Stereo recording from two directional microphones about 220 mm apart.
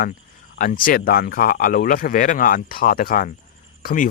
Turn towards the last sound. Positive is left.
turn(degrees=40)  # may be behind; listen again after turning